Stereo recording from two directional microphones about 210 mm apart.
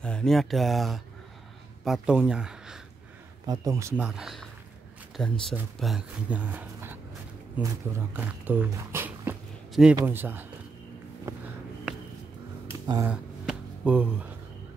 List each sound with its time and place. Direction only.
0.0 s speech: 5° left (ahead or behind)
3.4 s speech: 15° right (ahead or behind)
12.8 s speech: 20° right (ahead or behind)
13.1 s a sound: 5° right (ahead or behind)